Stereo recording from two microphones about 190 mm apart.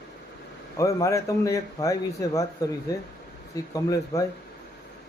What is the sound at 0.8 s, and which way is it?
Speech, 15° left (ahead or behind).